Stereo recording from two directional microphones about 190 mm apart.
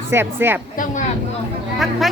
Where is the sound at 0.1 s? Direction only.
10° right (ahead or behind).